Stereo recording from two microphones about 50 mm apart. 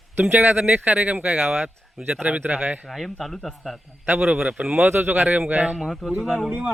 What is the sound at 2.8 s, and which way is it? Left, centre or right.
Speech, centre.